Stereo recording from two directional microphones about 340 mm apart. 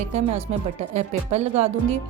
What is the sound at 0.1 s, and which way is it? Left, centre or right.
Speech, centre.